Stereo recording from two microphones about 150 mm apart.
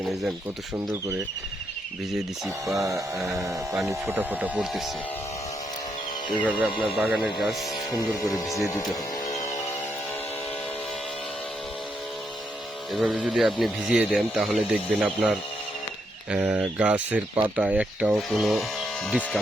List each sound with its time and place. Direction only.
2.8 s speech: 20° right (ahead or behind); by 4.8 s 5° right (ahead or behind)
6.4 s speech: 10° right (ahead or behind)
8.5 s speech: 20° left (ahead or behind)
9.3 s music: 55° left (ahead or behind)
12.9 s speech: centre (ahead or behind)